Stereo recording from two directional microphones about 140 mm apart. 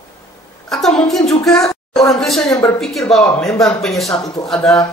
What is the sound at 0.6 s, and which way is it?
Speech, 5° left (ahead or behind).